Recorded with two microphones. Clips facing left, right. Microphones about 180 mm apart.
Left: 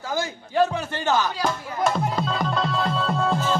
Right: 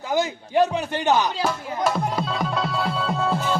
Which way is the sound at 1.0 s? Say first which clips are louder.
Right 2 dB; 20° right (ahead or behind).